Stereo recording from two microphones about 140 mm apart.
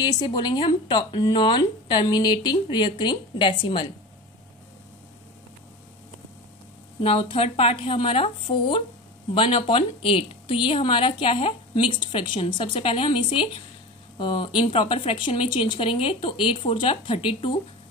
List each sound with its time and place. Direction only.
0.0 s a woman's voice: 30° left (ahead or behind)
7.0 s a woman's voice: 40° left (ahead or behind)